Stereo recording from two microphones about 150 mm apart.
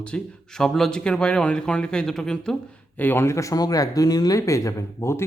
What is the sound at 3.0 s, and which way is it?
A man's voice, 15° left (ahead or behind).